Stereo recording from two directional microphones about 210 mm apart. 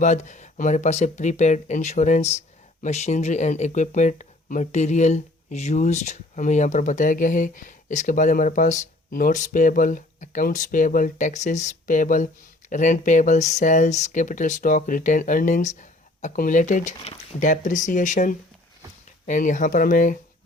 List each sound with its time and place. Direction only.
0.0 s speech: 35° left (ahead or behind)